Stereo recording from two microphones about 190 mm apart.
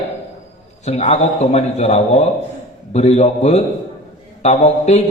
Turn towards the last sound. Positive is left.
turn(degrees=35)  # may be behind; listen again after turning